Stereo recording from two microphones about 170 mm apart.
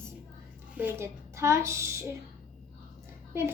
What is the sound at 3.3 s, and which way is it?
Speech, 15° right (ahead or behind).